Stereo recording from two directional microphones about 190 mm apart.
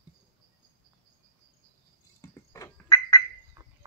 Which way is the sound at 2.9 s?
25° left (ahead or behind).